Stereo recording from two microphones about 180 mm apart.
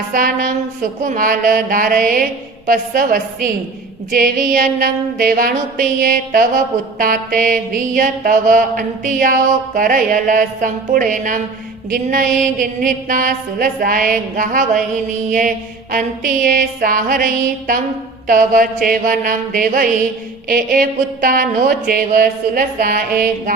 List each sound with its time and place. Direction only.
0.1 s mantra: 50° right (ahead or behind)
18.3 s mantra: 50° right (ahead or behind)